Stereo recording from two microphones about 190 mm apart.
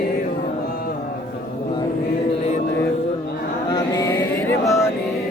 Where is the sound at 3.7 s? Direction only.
20° left (ahead or behind).